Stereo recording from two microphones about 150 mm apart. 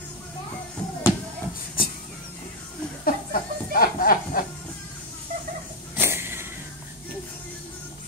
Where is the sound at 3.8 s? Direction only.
70° left (ahead or behind).